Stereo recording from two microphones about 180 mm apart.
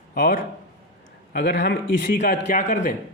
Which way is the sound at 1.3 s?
80° left.